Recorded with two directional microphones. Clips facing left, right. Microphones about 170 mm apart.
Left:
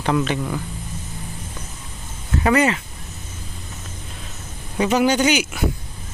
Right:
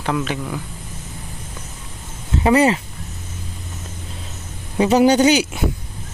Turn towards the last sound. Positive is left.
turn(degrees=-30)  # may be behind; listen again after turning